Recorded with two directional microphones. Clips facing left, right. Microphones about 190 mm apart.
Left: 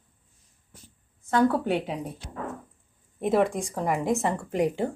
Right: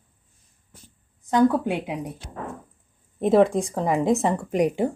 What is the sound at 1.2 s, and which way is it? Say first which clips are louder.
Speech: right 3 dB; 15° right (ahead or behind).